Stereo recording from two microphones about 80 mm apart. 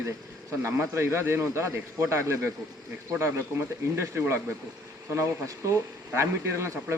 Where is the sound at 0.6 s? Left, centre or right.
Right.